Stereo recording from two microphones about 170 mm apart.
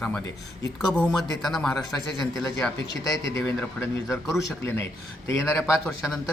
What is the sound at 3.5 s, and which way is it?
Speech, 15° left (ahead or behind).